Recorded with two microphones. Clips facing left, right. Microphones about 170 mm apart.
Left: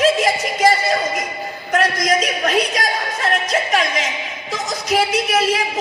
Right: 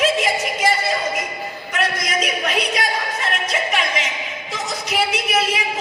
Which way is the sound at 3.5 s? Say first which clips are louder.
Left 3 dB; 40° left (ahead or behind).